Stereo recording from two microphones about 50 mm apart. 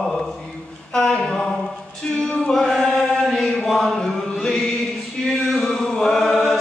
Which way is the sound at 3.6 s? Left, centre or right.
Centre.